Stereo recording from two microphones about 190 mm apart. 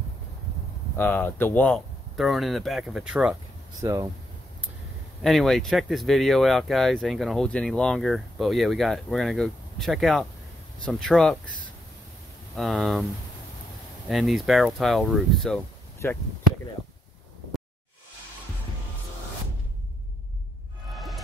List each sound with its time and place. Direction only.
0.9 s speech: 10° left (ahead or behind)
3.8 s speech: 15° right (ahead or behind)
5.2 s speech: centre (ahead or behind)
12.5 s speech: centre (ahead or behind)
14.0 s speech: centre (ahead or behind)
20.9 s music: centre (ahead or behind)